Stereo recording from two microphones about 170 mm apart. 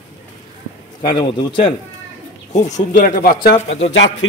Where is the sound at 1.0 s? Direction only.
25° left (ahead or behind).